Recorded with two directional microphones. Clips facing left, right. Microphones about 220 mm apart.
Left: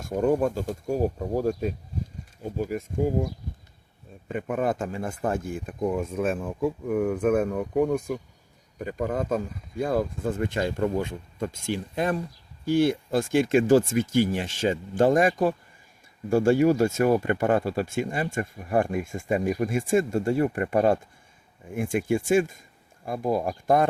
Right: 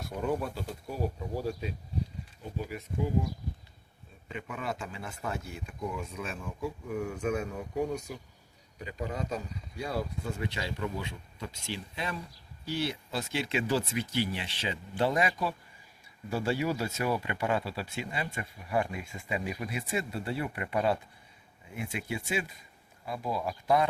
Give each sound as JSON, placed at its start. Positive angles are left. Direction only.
{"t": 0.0, "sound": "speech", "side_deg": 45}
{"t": 4.3, "sound": "speech", "side_deg": 50}